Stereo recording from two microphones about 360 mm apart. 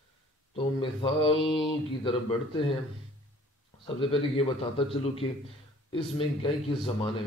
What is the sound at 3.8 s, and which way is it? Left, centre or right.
A man's voice, centre.